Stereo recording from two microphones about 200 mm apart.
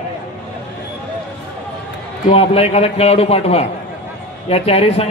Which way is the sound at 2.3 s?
30° left (ahead or behind).